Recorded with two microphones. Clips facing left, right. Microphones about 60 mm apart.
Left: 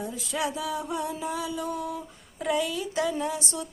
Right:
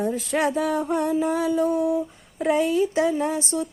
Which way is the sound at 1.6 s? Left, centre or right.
Right.